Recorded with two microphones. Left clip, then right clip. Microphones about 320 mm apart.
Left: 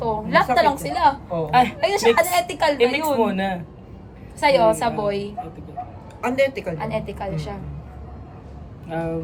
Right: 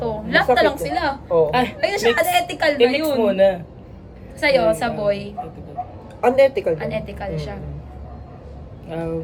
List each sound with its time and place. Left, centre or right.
0.0 s a sound: centre
0.5 s a woman's voice: centre
1.8 s a woman's voice: centre
6.2 s a woman's voice: centre
6.7 s a woman's voice: centre
8.9 s a woman's voice: centre